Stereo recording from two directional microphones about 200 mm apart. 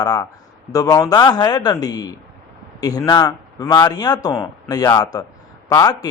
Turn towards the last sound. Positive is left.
turn(degrees=20)  # may be behind; listen again after turning